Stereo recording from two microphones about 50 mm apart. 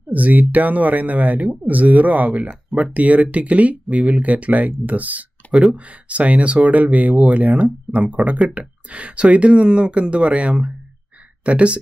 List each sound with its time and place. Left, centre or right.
0.1 s speech: right